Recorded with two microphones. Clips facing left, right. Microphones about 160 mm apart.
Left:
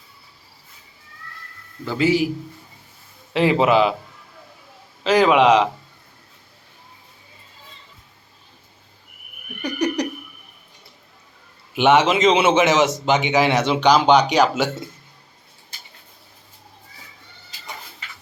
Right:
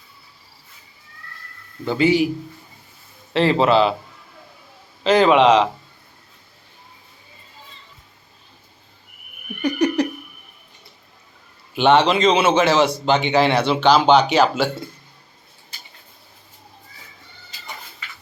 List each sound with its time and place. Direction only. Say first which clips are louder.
2.0 s a man's voice: right 2 dB; 5° left (ahead or behind)
3.3 s a man's voice: even; 10° left (ahead or behind)
5.0 s a man's voice: right 1 dB; 5° left (ahead or behind)
9.6 s laughter: right 6 dB; 10° right (ahead or behind)
11.7 s a man's voice: even; 15° left (ahead or behind)